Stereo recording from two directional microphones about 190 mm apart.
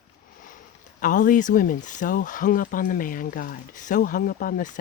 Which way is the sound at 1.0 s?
45° left (ahead or behind).